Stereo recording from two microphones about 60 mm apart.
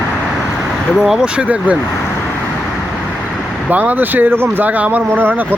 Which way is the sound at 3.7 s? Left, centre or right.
Right.